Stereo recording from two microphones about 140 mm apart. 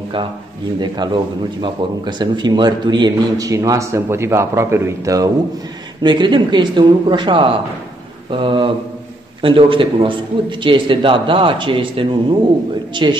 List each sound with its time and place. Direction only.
0.7 s speech: 30° right (ahead or behind)